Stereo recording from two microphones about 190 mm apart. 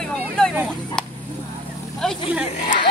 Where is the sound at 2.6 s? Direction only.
40° left (ahead or behind).